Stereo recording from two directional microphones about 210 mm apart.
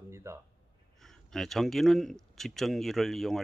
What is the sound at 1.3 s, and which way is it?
Speech, centre (ahead or behind).